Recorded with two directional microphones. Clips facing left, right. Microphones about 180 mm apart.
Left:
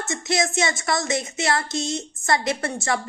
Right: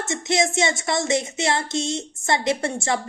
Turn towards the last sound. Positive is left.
turn(degrees=-25)  # may be behind; listen again after turning